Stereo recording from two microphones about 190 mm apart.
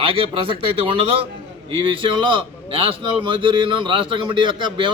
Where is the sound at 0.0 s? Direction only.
30° right (ahead or behind).